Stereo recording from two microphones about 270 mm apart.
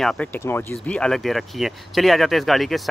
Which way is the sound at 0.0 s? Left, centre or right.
Centre.